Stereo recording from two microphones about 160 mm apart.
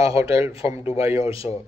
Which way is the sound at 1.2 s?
35° left (ahead or behind).